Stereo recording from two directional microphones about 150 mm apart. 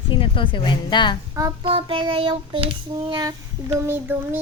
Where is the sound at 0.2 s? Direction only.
35° left (ahead or behind).